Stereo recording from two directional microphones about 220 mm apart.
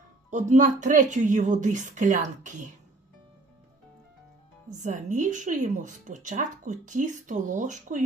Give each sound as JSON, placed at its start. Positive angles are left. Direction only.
{"t": 0.3, "sound": "speech", "side_deg": -35}
{"t": 4.8, "sound": "speech", "side_deg": -35}